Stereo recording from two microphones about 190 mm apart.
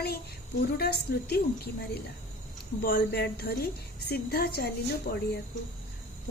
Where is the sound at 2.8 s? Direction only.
55° left (ahead or behind).